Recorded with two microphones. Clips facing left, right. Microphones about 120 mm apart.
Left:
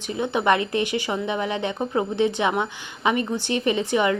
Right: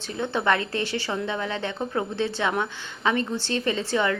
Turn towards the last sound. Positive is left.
turn(degrees=15)  # may be behind; listen again after turning